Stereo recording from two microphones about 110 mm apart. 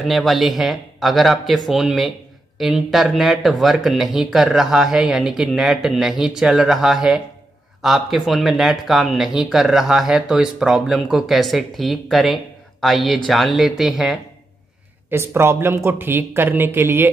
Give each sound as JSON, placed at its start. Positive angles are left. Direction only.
{"t": 0.0, "sound": "speech", "side_deg": 0}
{"t": 15.0, "sound": "speech", "side_deg": -20}